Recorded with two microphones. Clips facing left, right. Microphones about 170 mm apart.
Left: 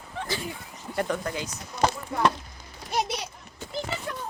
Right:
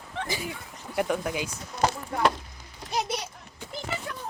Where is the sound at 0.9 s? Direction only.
10° right (ahead or behind).